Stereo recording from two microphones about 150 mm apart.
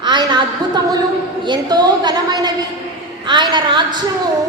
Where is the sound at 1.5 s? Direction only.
30° right (ahead or behind).